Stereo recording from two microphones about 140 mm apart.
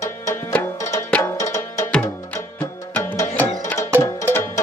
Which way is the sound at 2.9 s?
15° left (ahead or behind).